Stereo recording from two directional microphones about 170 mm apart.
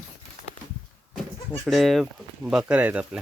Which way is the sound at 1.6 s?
Centre (ahead or behind).